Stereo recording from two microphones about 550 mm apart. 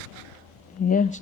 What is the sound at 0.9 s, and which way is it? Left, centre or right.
Speech, centre.